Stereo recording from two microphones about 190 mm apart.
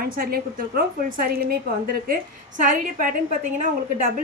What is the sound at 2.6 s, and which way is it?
A woman's voice, 45° right (ahead or behind).